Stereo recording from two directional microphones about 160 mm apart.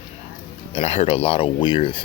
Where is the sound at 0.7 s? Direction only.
40° left (ahead or behind).